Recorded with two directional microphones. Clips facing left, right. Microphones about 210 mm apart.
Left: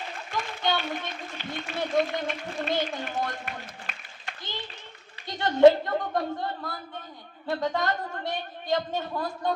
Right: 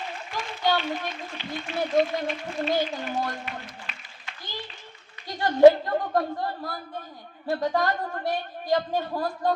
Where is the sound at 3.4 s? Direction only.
50° left (ahead or behind).